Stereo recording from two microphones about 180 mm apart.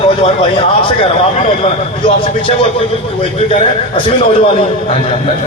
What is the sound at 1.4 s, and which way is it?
Speech, 35° left (ahead or behind).